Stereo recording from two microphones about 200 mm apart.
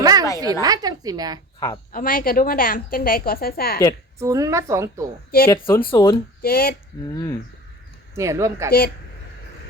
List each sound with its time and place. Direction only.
0.0 s a sound: 20° right (ahead or behind)
0.6 s a woman's voice: 20° right (ahead or behind)
1.5 s speech: 20° left (ahead or behind)
1.9 s a woman's voice: 45° left (ahead or behind)
4.2 s a woman's voice: 15° right (ahead or behind)
5.5 s speech: 10° left (ahead or behind)
6.4 s a woman's voice: 50° left (ahead or behind)
7.1 s speech: 15° left (ahead or behind)
8.1 s a woman's voice: 15° right (ahead or behind)